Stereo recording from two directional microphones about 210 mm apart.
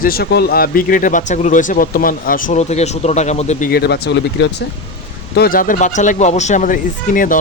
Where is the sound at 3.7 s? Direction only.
50° left (ahead or behind).